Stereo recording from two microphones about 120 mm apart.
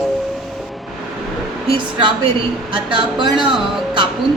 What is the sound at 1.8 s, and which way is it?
A woman's voice, 45° right (ahead or behind).